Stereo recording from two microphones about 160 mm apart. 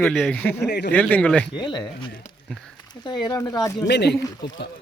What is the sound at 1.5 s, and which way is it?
Speech, 30° left (ahead or behind).